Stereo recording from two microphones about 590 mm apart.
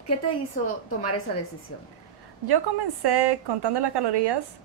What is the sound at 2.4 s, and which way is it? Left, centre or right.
A woman's voice, right.